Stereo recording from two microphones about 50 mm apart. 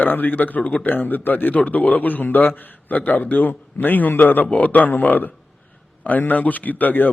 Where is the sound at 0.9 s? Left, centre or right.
Left.